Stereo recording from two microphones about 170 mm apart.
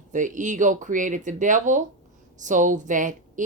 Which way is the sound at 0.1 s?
50° right (ahead or behind).